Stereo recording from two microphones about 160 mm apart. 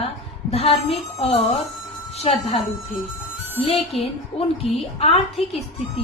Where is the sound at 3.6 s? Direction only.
35° left (ahead or behind).